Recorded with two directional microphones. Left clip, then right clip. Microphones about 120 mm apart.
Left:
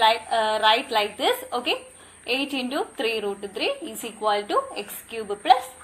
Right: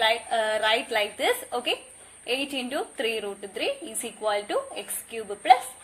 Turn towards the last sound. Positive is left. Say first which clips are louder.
# even
turn(degrees=-45)  # may be behind; listen again after turning